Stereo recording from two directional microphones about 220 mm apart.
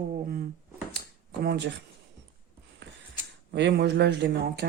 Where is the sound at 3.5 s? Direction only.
50° right (ahead or behind).